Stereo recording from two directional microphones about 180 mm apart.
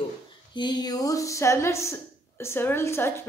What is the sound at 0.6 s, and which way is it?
Speech, 25° left (ahead or behind).